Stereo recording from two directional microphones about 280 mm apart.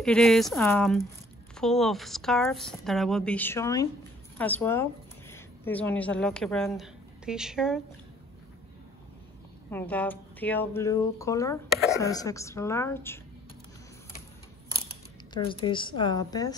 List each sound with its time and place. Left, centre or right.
0.0 s speech: centre
9.7 s speech: centre
15.3 s speech: centre